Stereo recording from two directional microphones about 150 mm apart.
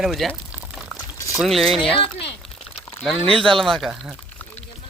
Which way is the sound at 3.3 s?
5° left (ahead or behind).